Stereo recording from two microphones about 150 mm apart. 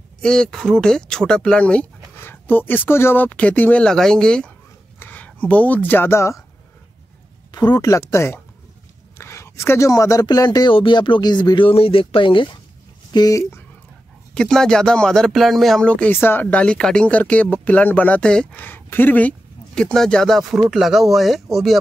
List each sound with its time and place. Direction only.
0.2 s speech: 5° left (ahead or behind)
7.5 s speech: 25° left (ahead or behind)
14.3 s speech: 5° left (ahead or behind)